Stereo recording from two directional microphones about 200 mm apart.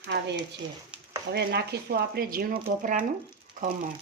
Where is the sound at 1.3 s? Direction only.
55° right (ahead or behind).